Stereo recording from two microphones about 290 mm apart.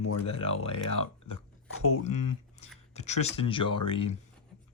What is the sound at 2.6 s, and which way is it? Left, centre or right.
Speech, left.